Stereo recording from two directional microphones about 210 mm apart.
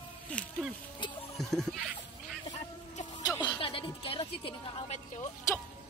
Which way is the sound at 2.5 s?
30° left (ahead or behind).